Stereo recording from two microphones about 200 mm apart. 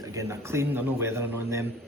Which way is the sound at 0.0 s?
15° right (ahead or behind).